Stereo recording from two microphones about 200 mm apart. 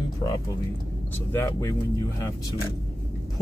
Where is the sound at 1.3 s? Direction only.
15° left (ahead or behind).